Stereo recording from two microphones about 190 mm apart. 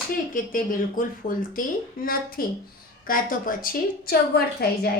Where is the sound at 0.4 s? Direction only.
45° left (ahead or behind).